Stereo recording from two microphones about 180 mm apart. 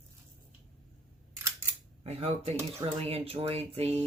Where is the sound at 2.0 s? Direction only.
35° right (ahead or behind).